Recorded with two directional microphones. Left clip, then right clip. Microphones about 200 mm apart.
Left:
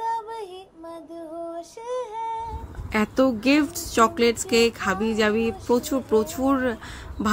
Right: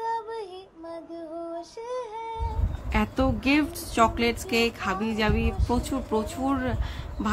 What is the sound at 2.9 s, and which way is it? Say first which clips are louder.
A woman's voice: left 5 dB; 20° left (ahead or behind).